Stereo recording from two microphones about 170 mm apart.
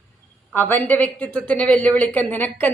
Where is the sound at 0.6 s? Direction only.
10° left (ahead or behind).